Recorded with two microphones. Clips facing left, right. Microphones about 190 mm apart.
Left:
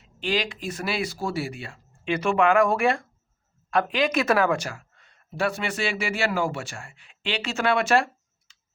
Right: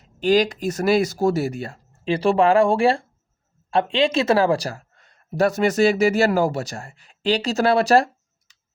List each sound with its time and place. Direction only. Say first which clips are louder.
0.0 s speech: right 9 dB; 40° right (ahead or behind)